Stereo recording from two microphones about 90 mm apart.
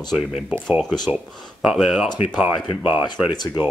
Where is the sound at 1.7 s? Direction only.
5° right (ahead or behind).